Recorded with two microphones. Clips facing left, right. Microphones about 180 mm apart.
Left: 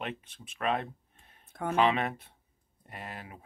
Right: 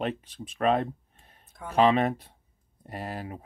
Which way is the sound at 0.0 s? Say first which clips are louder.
Right 8 dB; 35° right (ahead or behind).